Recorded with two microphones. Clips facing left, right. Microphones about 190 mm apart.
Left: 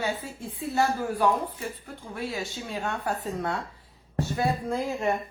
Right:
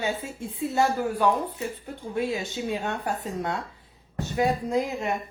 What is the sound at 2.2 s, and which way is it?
Speech, 20° right (ahead or behind).